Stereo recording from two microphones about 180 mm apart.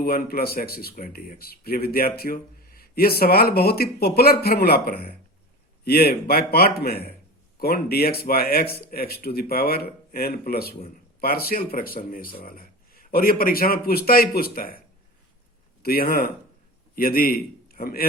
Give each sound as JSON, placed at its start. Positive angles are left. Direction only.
{"t": 0.0, "sound": "speech", "side_deg": 55}
{"t": 15.8, "sound": "a man's voice", "side_deg": 55}